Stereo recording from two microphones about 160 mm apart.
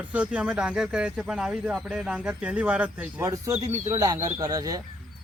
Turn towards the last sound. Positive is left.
turn(degrees=-25)  # may be behind; listen again after turning